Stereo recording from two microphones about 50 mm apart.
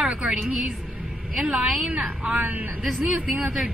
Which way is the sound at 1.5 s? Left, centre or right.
Centre.